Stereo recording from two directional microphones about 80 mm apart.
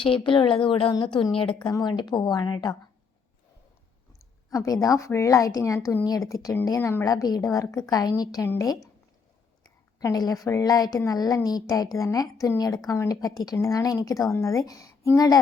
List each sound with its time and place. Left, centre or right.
0.2 s a woman's voice: left
1.8 s speech: left
4.5 s a woman's voice: left
6.7 s a woman's voice: left
7.0 s a woman's voice: left
10.0 s a woman's voice: left